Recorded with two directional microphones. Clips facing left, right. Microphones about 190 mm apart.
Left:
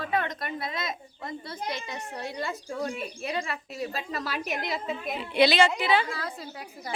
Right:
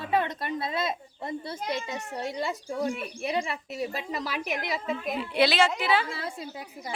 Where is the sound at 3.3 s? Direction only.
20° right (ahead or behind).